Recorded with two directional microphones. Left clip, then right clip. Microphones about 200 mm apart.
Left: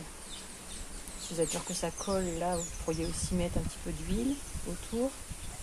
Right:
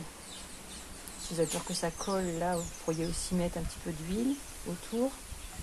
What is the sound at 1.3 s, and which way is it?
Speech, 20° right (ahead or behind).